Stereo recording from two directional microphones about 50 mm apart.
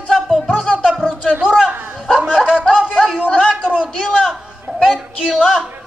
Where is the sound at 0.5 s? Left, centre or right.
Centre.